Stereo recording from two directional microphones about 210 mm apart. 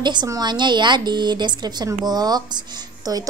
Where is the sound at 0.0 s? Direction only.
20° right (ahead or behind).